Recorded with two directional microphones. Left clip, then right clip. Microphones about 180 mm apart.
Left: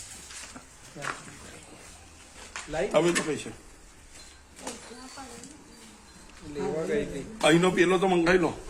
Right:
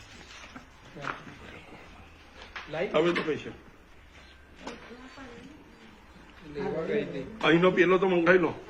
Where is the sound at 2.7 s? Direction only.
85° left.